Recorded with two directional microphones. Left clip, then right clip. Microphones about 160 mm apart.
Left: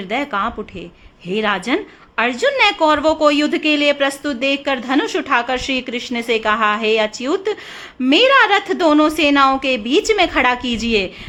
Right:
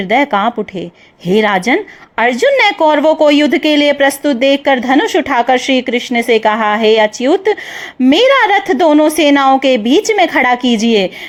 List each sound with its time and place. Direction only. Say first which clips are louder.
0.1 s a woman's voice: right 8 dB; 35° right (ahead or behind)